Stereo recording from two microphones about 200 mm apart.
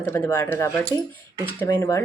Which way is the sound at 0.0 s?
10° left (ahead or behind).